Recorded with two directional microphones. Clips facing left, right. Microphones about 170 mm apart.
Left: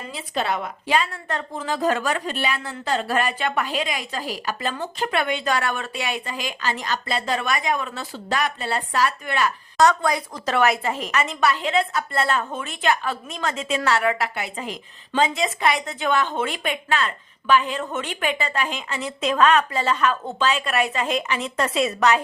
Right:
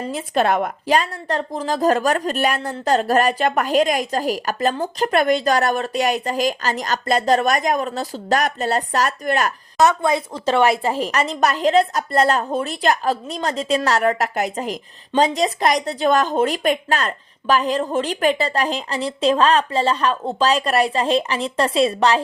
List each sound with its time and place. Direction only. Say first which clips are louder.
0.1 s a woman's voice: right 6 dB; 50° right (ahead or behind)
9.8 s a woman's voice: right 2 dB; 25° right (ahead or behind)